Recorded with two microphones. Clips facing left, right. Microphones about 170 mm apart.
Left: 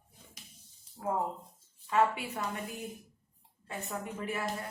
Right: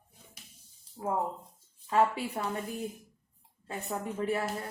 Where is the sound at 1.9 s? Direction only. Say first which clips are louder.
Right 2 dB; 35° right (ahead or behind).